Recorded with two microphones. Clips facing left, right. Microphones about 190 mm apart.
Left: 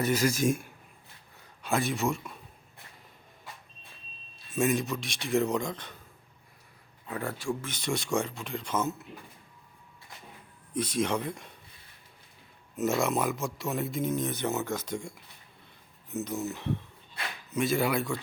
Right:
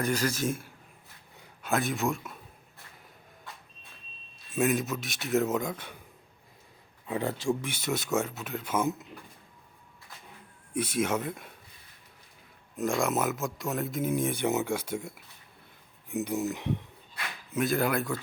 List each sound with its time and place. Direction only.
0.0 s speech: 10° left (ahead or behind)
1.6 s speech: centre (ahead or behind)
4.5 s speech: centre (ahead or behind)
7.2 s speech: 20° right (ahead or behind)
7.7 s speech: 5° right (ahead or behind)
10.7 s speech: 5° right (ahead or behind)
12.7 s speech: 5° left (ahead or behind)
14.1 s speech: 10° right (ahead or behind)
17.5 s speech: centre (ahead or behind)